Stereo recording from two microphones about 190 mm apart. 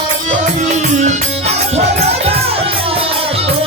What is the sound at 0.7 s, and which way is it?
Music, 40° right (ahead or behind).